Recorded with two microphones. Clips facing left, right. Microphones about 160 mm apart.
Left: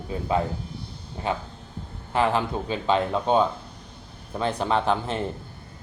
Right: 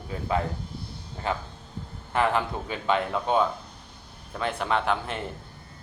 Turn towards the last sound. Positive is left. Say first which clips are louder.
# left 3 dB
turn(degrees=30)  # may be behind; listen again after turning